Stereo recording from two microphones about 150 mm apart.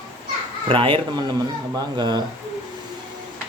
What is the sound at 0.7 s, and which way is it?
Speech, 35° right (ahead or behind).